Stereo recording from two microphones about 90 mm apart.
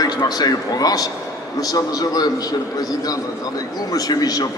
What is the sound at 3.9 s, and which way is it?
Speech, 45° left (ahead or behind).